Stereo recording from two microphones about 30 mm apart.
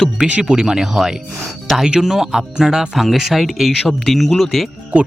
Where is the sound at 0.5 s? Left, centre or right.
Right.